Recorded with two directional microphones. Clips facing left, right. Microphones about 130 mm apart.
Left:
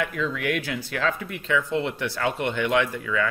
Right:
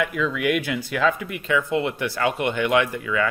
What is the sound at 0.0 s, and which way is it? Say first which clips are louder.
Speech: right 4 dB; 10° right (ahead or behind).